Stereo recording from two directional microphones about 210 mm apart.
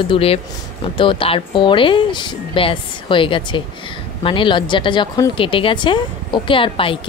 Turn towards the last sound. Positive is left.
turn(degrees=25)  # may be behind; listen again after turning